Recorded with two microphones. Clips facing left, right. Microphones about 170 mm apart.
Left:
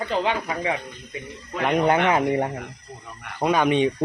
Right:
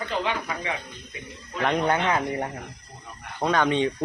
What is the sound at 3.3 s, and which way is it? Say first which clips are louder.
Speech: left 3 dB; 10° left (ahead or behind).